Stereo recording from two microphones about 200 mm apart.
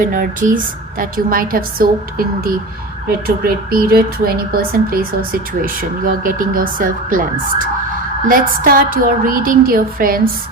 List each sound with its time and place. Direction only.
0.0 s speech: 40° right (ahead or behind)